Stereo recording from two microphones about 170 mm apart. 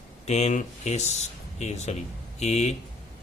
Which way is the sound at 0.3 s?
40° left (ahead or behind).